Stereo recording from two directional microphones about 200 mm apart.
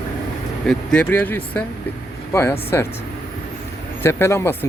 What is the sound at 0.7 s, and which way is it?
Speech, 5° left (ahead or behind).